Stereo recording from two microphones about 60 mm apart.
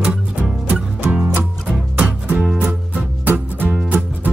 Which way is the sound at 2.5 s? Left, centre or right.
Right.